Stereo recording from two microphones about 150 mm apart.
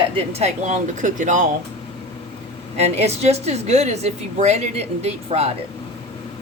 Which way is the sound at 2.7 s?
45° right (ahead or behind).